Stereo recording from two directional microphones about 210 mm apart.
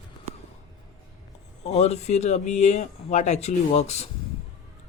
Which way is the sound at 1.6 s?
30° left (ahead or behind).